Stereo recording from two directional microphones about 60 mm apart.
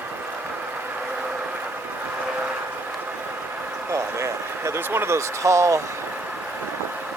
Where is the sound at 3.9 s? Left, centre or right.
Right.